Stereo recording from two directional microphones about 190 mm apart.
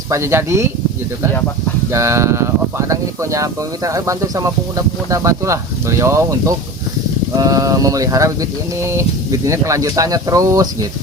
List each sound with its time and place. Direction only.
0.1 s speech: 15° right (ahead or behind)
1.9 s speech: 15° right (ahead or behind)